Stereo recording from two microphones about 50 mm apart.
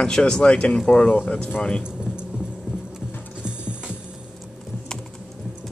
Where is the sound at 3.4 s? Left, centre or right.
Centre.